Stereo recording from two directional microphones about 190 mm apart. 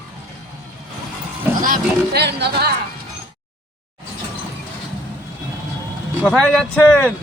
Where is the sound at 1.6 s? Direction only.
50° right (ahead or behind).